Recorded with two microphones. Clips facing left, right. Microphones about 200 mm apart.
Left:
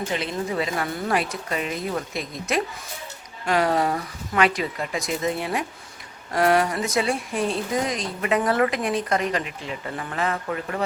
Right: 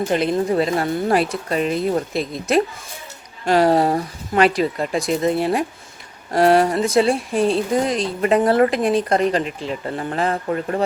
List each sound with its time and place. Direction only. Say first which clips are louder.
0.1 s speech: right 8 dB; 45° right (ahead or behind)